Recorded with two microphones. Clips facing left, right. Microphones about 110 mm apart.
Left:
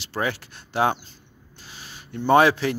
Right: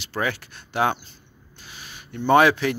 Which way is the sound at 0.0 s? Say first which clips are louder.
Even; 30° left (ahead or behind).